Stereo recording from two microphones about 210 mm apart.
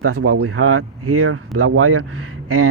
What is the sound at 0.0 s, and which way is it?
Speech, 85° right.